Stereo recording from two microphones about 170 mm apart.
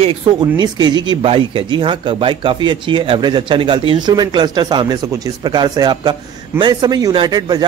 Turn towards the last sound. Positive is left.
turn(degrees=-25)  # may be behind; listen again after turning